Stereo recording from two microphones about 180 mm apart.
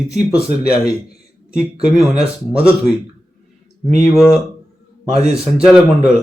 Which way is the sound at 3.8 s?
15° left (ahead or behind).